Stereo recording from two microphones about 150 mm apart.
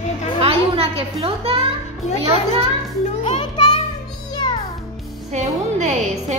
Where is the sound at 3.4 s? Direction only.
30° left (ahead or behind).